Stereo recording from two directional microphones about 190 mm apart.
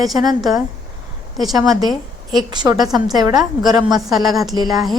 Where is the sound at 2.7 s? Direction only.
Centre (ahead or behind).